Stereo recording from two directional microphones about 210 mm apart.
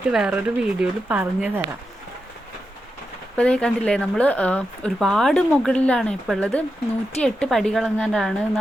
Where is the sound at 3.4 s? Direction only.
5° left (ahead or behind).